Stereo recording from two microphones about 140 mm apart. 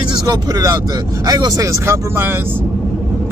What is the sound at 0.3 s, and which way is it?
Speech, 25° right (ahead or behind).